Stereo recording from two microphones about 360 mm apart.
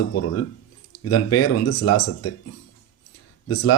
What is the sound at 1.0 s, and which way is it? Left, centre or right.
Speech, left.